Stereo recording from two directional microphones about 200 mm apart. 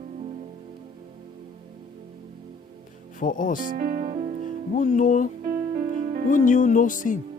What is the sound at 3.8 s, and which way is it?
Speech, 45° right (ahead or behind).